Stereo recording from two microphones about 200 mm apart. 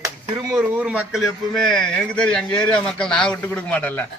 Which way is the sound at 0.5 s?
5° right (ahead or behind).